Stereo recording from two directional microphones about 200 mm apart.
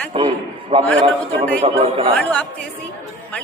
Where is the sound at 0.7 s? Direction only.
30° right (ahead or behind).